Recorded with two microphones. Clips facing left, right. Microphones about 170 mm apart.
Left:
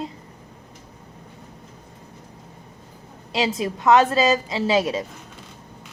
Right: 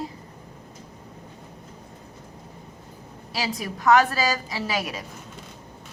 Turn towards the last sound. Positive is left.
turn(degrees=25)  # may be behind; listen again after turning